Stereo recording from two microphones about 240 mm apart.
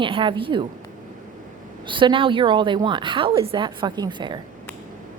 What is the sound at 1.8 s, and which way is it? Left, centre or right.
Speech, right.